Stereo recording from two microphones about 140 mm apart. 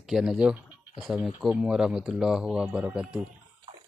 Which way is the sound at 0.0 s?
5° right (ahead or behind).